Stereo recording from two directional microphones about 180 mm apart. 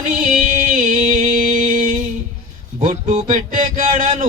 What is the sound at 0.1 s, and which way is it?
Music, 45° right (ahead or behind).